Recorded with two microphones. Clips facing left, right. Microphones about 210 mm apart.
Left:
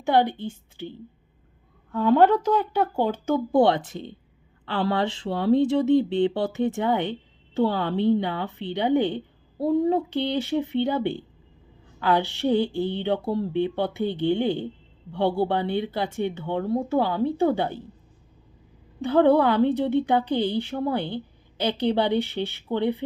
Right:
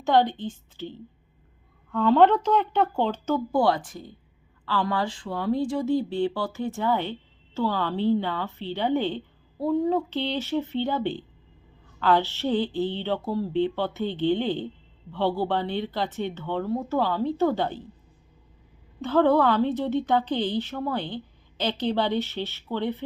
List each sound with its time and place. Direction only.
0.0 s speech: 10° left (ahead or behind)
1.9 s speech: 5° left (ahead or behind)
16.6 s speech: 25° left (ahead or behind)
16.9 s speech: 15° left (ahead or behind)
19.0 s speech: 15° left (ahead or behind)